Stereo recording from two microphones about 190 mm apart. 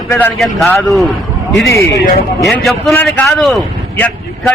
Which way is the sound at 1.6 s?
15° left (ahead or behind).